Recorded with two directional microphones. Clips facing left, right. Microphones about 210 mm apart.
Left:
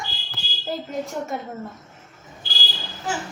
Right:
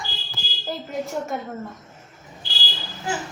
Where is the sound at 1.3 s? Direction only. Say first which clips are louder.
Right 1 dB; centre (ahead or behind).